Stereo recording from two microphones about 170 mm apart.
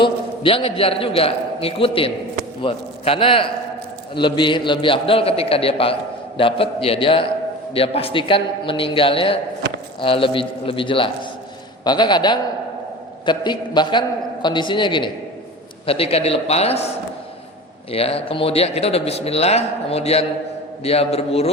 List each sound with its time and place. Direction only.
0.0 s a man's voice: 30° left (ahead or behind)
17.9 s a man's voice: 35° left (ahead or behind)